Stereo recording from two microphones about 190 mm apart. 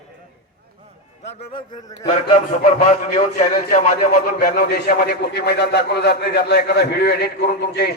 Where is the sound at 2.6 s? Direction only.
40° left (ahead or behind).